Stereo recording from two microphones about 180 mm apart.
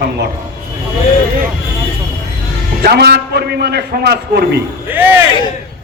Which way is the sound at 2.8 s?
65° right (ahead or behind).